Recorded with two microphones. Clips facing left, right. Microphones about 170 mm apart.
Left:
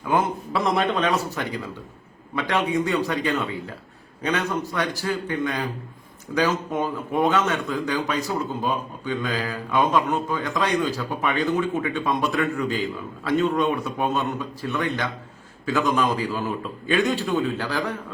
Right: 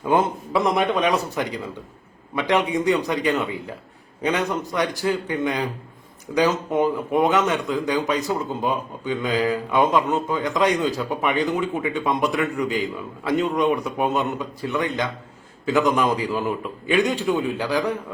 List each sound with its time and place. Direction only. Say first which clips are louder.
0.0 s a man's voice: right 3 dB; 25° right (ahead or behind)